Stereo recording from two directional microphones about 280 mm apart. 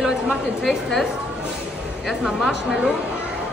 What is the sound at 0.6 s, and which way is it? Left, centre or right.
Speech, centre.